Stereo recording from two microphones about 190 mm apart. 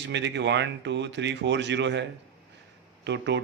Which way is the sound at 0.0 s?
65° right (ahead or behind).